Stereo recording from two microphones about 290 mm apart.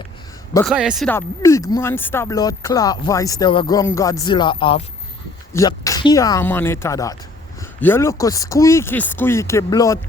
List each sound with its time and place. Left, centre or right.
0.5 s speech: centre